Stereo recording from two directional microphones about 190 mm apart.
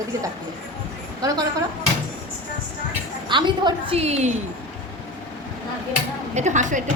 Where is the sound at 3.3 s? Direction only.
25° right (ahead or behind).